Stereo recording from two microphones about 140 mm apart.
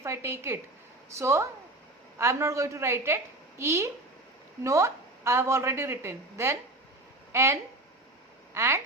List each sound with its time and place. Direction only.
0.0 s a woman's voice: 20° right (ahead or behind)